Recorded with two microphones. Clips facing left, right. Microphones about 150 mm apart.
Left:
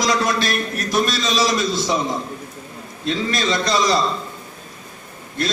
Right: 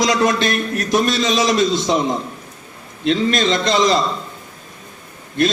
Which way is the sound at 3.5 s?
20° right (ahead or behind).